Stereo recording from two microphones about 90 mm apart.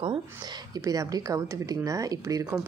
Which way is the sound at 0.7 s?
40° right (ahead or behind).